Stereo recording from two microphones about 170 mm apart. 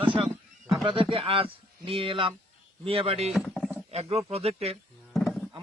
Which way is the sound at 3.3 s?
Centre (ahead or behind).